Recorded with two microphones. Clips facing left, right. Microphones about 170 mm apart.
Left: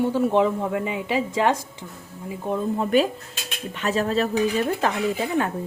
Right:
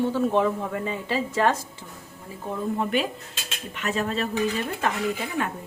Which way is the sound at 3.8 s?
35° left (ahead or behind).